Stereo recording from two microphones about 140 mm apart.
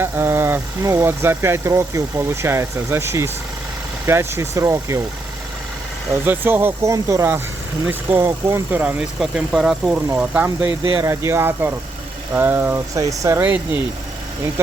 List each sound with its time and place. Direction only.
0.0 s speech: 15° right (ahead or behind)
6.2 s speech: 15° right (ahead or behind)